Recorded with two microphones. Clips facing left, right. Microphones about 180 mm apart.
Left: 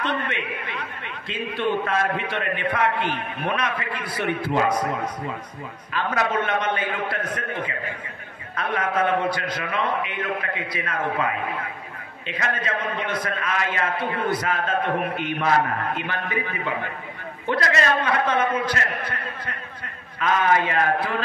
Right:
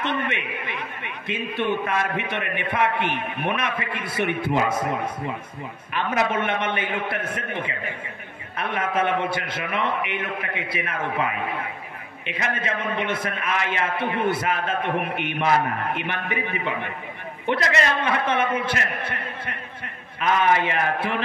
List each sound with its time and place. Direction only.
0.0 s a man's voice: 20° right (ahead or behind)